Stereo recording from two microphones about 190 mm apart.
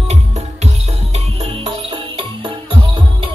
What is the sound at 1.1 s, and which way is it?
Music, 30° right (ahead or behind).